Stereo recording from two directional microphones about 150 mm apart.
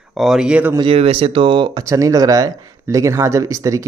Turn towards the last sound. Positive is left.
turn(degrees=-20)  # may be behind; listen again after turning